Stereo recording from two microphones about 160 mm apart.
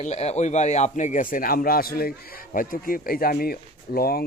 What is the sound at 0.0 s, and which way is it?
Speech, 45° left (ahead or behind).